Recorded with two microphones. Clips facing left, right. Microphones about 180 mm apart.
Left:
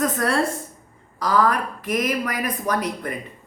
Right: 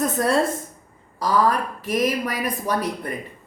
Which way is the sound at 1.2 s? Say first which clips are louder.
Even; 30° right (ahead or behind).